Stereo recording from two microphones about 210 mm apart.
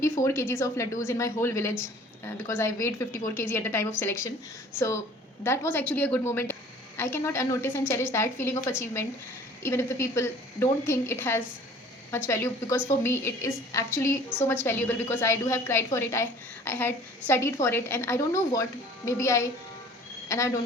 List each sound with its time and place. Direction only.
0.0 s a woman's voice: 15° left (ahead or behind)
5.4 s a woman's voice: 10° left (ahead or behind)